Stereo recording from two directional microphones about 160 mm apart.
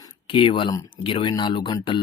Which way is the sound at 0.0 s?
30° left (ahead or behind).